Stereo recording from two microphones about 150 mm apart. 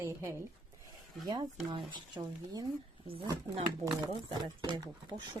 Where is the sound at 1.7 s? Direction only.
30° right (ahead or behind).